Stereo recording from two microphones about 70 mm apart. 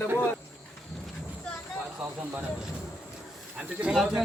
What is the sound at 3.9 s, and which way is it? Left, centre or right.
Speech, centre.